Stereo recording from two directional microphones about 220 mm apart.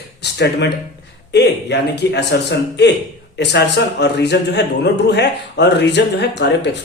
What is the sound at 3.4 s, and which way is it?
A man's voice, 50° left (ahead or behind).